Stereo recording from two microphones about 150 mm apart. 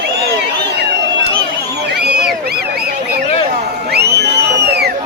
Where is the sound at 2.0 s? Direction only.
90° right.